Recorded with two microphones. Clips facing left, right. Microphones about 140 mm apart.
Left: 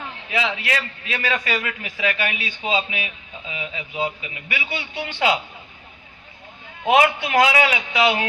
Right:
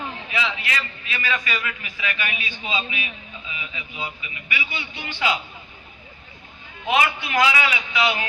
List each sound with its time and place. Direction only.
0.3 s a man's voice: 65° left (ahead or behind)
6.8 s a man's voice: 65° left (ahead or behind)